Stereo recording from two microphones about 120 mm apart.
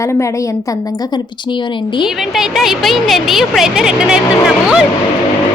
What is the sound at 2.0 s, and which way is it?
A woman's voice, 5° right (ahead or behind).